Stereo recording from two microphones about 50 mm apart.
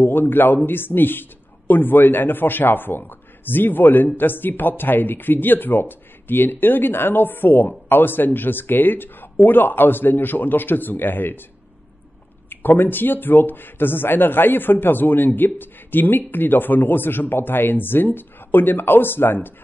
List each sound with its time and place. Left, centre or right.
0.0 s speech: left
12.4 s speech: left